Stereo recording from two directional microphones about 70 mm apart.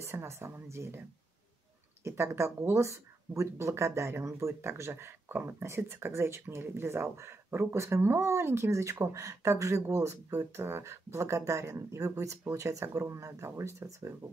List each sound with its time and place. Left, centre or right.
0.0 s speech: right
2.0 s speech: right